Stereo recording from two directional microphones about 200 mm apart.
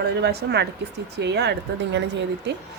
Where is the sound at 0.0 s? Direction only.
55° right (ahead or behind).